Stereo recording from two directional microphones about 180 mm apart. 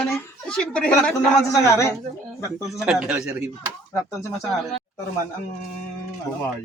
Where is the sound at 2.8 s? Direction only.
5° right (ahead or behind).